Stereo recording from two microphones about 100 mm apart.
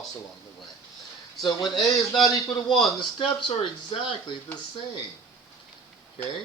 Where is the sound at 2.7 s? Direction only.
Centre (ahead or behind).